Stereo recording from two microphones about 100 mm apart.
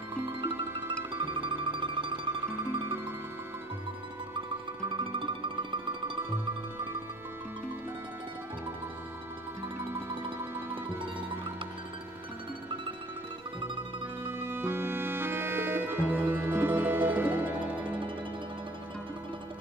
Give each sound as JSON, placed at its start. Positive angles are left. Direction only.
{"t": 1.2, "sound": "music", "side_deg": -55}
{"t": 2.6, "sound": "music", "side_deg": -25}
{"t": 4.8, "sound": "music", "side_deg": -55}
{"t": 9.8, "sound": "music", "side_deg": -20}
{"t": 10.7, "sound": "music", "side_deg": -55}
{"t": 14.2, "sound": "music", "side_deg": -25}
{"t": 17.8, "sound": "music", "side_deg": -55}